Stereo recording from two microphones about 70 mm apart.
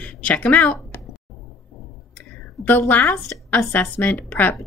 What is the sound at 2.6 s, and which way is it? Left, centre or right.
Speech, left.